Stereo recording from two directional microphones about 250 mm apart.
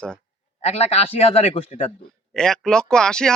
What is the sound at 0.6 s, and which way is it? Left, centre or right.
A man's voice, left.